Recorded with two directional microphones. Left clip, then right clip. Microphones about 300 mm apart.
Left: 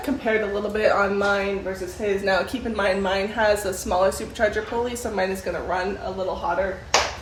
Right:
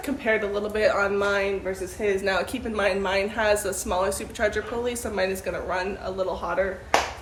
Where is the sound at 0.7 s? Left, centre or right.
Centre.